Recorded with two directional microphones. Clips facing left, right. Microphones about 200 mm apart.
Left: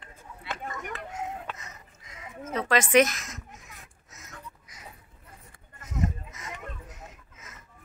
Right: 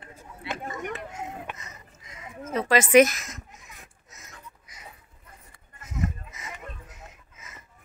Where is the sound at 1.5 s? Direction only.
20° right (ahead or behind).